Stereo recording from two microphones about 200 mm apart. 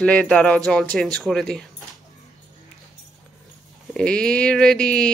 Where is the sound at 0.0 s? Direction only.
5° left (ahead or behind).